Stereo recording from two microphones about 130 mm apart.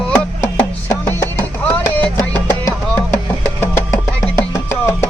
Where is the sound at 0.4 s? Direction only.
15° left (ahead or behind).